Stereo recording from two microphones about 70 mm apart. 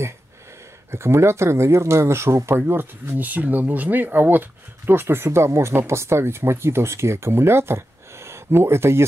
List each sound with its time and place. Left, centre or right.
0.9 s speech: right